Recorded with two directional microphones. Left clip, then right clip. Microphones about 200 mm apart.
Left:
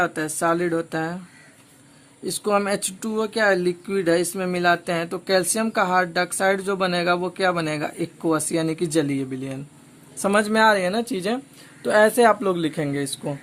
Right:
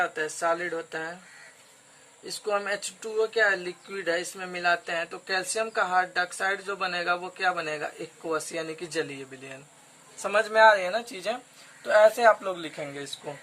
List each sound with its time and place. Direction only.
0.0 s speech: 45° left (ahead or behind)
2.2 s speech: 45° left (ahead or behind)
10.2 s speech: 45° left (ahead or behind)